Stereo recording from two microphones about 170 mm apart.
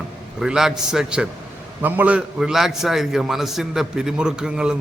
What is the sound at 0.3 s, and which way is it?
A man's voice, 5° right (ahead or behind).